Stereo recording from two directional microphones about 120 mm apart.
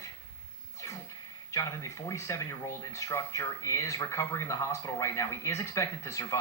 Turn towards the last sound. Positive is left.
turn(degrees=25)  # may be behind; listen again after turning